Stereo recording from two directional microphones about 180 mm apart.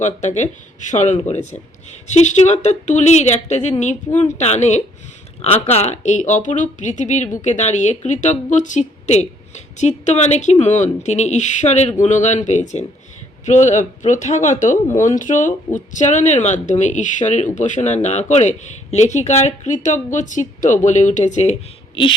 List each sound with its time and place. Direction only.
0.0 s a woman's voice: 40° left (ahead or behind)